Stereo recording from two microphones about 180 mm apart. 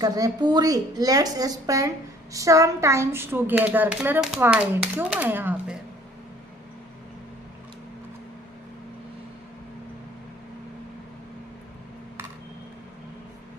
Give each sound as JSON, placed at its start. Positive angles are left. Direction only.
{"t": 0.0, "sound": "a woman's voice", "side_deg": -20}